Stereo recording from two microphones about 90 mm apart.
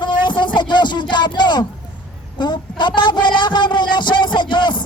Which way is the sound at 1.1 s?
55° left (ahead or behind).